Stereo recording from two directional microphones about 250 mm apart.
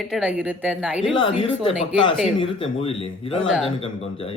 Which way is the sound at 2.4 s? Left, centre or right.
Left.